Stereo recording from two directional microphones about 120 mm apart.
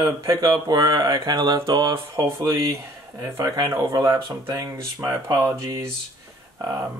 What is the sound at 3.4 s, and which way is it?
Speech, 35° right (ahead or behind).